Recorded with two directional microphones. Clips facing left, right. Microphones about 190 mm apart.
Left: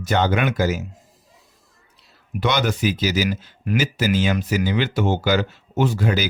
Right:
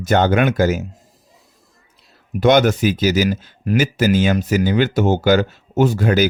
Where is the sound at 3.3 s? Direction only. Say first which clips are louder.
Right 4 dB; 35° right (ahead or behind).